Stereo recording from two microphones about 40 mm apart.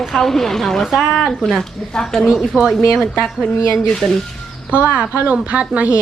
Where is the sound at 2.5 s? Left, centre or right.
Right.